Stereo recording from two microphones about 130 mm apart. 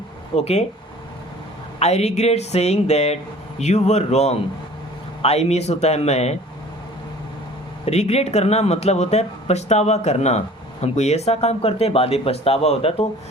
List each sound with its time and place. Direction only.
0.3 s speech: 50° left (ahead or behind)
1.8 s speech: 55° left (ahead or behind)
7.9 s speech: 55° left (ahead or behind)